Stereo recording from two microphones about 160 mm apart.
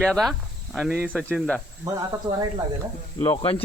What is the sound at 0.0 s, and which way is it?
Speech, centre (ahead or behind).